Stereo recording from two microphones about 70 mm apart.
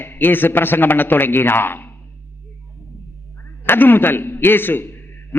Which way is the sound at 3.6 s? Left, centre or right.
Left.